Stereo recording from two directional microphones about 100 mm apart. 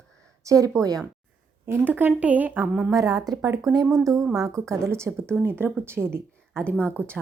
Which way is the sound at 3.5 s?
30° right (ahead or behind).